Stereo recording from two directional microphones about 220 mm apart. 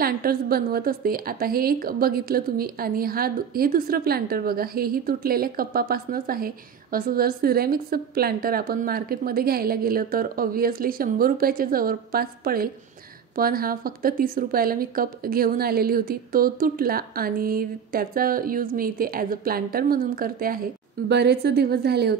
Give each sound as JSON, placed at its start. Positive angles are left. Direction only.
{"t": 0.0, "sound": "a woman's voice", "side_deg": -45}